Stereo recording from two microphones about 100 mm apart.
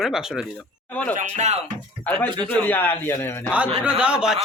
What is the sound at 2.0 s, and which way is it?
A man's voice, 15° left (ahead or behind).